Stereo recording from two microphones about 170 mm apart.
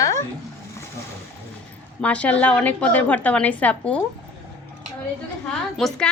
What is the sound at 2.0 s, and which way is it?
A woman's voice, 5° left (ahead or behind).